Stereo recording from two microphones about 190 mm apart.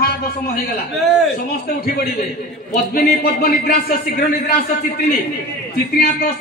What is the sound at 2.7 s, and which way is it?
A man's voice, 50° left (ahead or behind).